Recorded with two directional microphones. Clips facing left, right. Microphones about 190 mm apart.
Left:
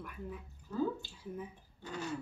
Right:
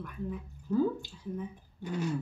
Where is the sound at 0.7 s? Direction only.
25° right (ahead or behind).